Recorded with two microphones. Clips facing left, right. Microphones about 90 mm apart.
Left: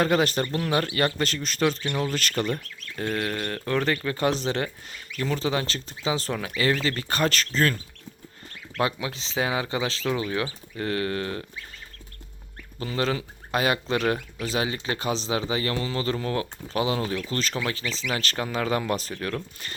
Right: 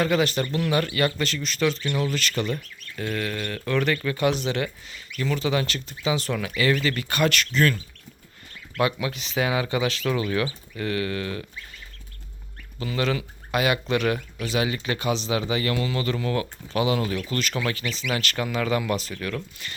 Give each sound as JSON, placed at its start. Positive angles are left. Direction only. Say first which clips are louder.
{"t": 0.0, "sound": "speech", "louder": "even", "side_deg": 45}
{"t": 8.8, "sound": "speech", "louder": "right 2 dB", "side_deg": 25}
{"t": 12.8, "sound": "speech", "louder": "right 1 dB", "side_deg": 35}